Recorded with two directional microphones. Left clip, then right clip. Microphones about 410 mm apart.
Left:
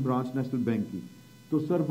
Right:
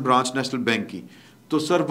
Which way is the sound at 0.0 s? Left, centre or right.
Centre.